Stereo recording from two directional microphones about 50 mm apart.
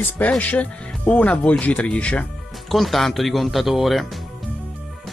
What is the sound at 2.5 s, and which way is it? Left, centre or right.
Speech, centre.